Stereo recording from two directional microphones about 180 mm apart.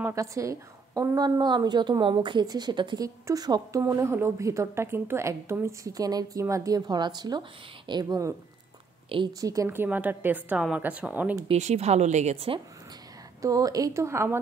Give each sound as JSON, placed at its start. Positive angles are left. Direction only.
{"t": 0.0, "sound": "a woman's voice", "side_deg": -15}
{"t": 11.4, "sound": "speech", "side_deg": -40}
{"t": 13.4, "sound": "a woman's voice", "side_deg": -20}